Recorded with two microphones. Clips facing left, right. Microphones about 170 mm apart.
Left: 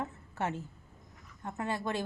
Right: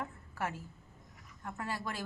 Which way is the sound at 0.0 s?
25° left (ahead or behind).